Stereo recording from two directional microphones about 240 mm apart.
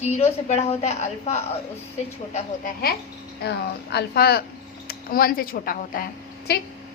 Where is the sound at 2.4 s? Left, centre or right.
Left.